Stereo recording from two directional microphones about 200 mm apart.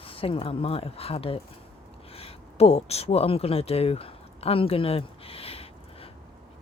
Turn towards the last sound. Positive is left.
turn(degrees=30)  # may be behind; listen again after turning